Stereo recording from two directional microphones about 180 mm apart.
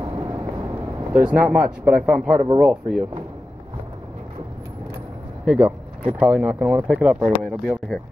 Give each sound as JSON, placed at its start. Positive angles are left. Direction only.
{"t": 0.0, "sound": "vehicle", "side_deg": -25}
{"t": 1.1, "sound": "speech", "side_deg": -5}
{"t": 5.4, "sound": "speech", "side_deg": -5}